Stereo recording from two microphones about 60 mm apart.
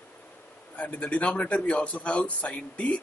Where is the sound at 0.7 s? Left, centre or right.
Left.